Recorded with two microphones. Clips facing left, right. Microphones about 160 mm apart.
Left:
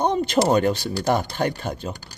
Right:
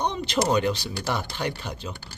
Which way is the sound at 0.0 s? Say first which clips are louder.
Left 6 dB; 50° left (ahead or behind).